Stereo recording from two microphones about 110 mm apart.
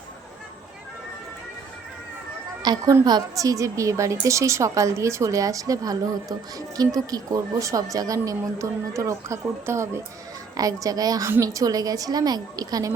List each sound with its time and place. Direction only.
2.6 s a woman's voice: 35° right (ahead or behind)